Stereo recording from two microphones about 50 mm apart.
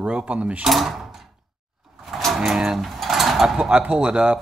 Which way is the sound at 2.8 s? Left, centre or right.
Centre.